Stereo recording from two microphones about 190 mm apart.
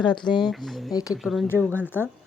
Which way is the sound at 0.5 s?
Centre (ahead or behind).